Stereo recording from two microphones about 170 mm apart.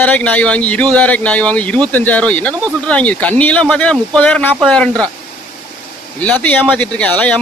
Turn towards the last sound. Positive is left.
turn(degrees=5)  # may be behind; listen again after turning